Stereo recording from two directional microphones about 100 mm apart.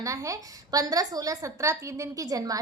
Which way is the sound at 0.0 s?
35° right (ahead or behind).